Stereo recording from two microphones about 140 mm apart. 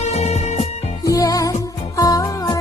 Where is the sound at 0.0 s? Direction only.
50° left (ahead or behind).